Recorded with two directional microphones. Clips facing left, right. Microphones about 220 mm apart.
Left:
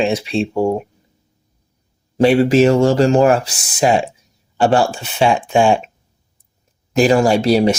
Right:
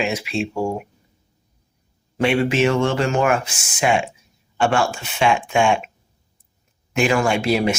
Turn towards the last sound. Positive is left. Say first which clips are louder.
# left 6 dB
turn(degrees=35)  # may be behind; listen again after turning